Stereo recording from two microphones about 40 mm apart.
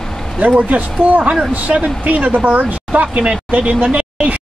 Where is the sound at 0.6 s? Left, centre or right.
Right.